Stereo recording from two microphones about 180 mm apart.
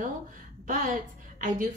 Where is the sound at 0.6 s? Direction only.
45° right (ahead or behind).